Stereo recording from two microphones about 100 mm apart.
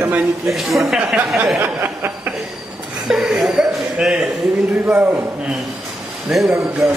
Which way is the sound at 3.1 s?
5° right (ahead or behind).